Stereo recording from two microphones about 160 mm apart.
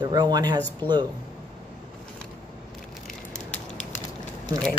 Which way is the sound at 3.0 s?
5° left (ahead or behind).